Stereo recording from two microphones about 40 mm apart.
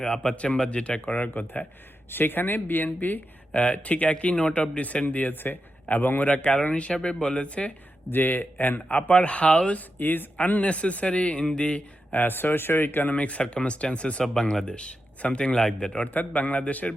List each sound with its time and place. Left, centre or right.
0.0 s speech: centre
1.3 s speech: left
3.5 s speech: left
5.0 s speech: left
6.2 s speech: left
8.1 s speech: left
9.7 s speech: left
10.3 s speech: left
12.1 s speech: left
13.1 s speech: left
16.1 s speech: left